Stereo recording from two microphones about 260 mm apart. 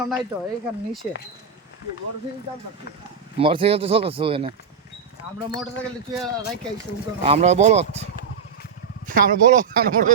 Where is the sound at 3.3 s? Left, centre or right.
Centre.